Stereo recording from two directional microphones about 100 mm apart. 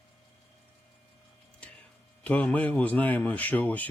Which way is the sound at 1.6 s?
10° left (ahead or behind).